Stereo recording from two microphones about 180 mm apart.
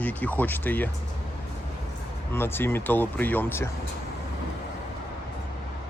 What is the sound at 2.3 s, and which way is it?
Speech, 15° left (ahead or behind).